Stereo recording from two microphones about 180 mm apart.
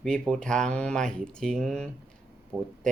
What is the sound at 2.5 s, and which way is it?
Speech, 10° right (ahead or behind).